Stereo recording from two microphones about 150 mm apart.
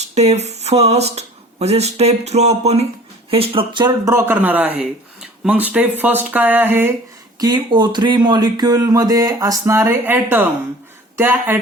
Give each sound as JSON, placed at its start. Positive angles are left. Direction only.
{"t": 0.0, "sound": "speech", "side_deg": -45}
{"t": 7.3, "sound": "speech", "side_deg": -30}